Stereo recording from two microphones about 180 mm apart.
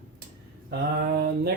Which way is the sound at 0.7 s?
60° right (ahead or behind).